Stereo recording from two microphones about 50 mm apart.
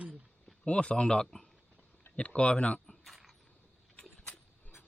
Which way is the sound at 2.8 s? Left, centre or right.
Centre.